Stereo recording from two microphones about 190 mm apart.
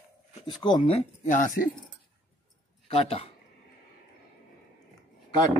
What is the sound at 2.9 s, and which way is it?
Speech, 30° left (ahead or behind).